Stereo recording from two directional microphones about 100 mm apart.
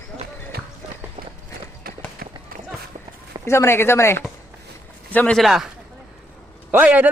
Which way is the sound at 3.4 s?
25° left (ahead or behind).